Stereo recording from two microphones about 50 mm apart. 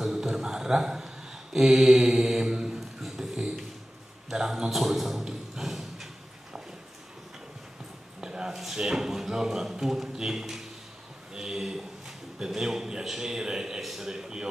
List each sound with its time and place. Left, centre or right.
0.0 s mantra: centre
4.3 s a man's voice: centre
8.2 s speech: centre
11.3 s a sound: centre
12.4 s a man's voice: centre